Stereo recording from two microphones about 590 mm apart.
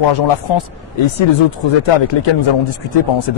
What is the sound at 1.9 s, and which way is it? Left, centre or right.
Speech, left.